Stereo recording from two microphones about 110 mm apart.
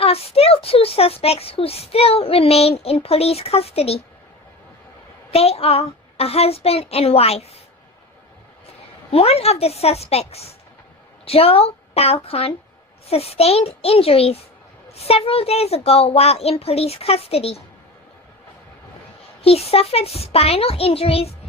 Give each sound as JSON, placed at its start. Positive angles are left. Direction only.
{"t": 0.0, "sound": "a child's voice", "side_deg": 65}
{"t": 5.3, "sound": "a child's voice", "side_deg": 65}
{"t": 9.0, "sound": "a woman's voice", "side_deg": 65}
{"t": 19.4, "sound": "a child's voice", "side_deg": 65}